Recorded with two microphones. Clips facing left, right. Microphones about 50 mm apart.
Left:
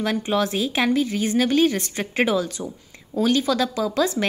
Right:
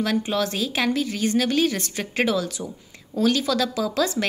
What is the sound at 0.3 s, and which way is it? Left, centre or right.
Speech, centre.